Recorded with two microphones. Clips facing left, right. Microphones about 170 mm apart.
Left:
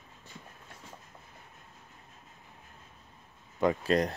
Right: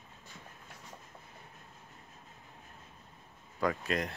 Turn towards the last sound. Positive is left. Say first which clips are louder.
# left 5 dB
turn(degrees=25)  # may be behind; listen again after turning